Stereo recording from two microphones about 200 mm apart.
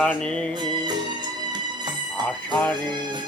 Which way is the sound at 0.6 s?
20° right (ahead or behind).